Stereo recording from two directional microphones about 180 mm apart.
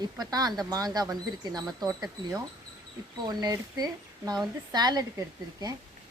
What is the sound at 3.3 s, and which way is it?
Speech, 20° right (ahead or behind).